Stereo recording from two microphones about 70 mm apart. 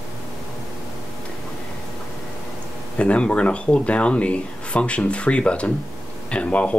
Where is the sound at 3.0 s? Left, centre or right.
Centre.